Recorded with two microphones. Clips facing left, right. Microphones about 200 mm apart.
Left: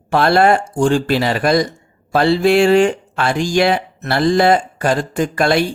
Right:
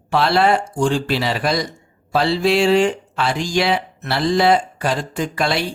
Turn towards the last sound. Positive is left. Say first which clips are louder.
# left 5 dB
turn(degrees=50)  # may be behind; listen again after turning